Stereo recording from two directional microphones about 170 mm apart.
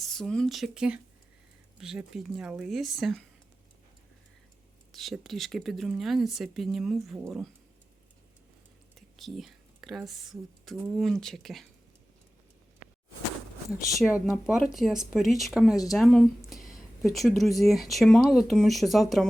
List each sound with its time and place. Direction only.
0.0 s speech: 5° left (ahead or behind)
4.9 s speech: centre (ahead or behind)
9.0 s speech: centre (ahead or behind)
14.0 s speech: 5° right (ahead or behind)